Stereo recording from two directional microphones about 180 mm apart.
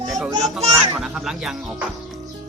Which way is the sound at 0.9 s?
Centre (ahead or behind).